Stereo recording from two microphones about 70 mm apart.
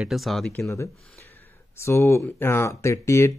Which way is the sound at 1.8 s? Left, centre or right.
Left.